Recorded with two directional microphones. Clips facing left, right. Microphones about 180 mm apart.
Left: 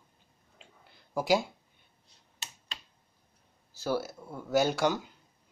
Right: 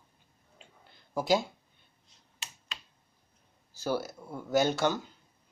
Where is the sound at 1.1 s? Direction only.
10° left (ahead or behind).